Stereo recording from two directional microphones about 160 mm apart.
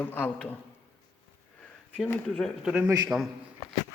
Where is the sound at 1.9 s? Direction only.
10° left (ahead or behind).